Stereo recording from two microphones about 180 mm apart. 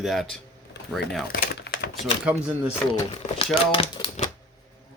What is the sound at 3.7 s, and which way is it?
Typewriter, 35° left (ahead or behind).